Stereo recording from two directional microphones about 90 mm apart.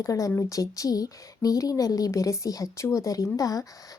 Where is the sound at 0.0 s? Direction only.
35° left (ahead or behind).